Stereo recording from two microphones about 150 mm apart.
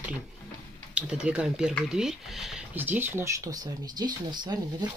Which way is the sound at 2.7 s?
15° right (ahead or behind).